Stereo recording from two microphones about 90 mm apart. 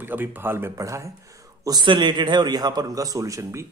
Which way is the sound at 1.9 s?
60° right (ahead or behind).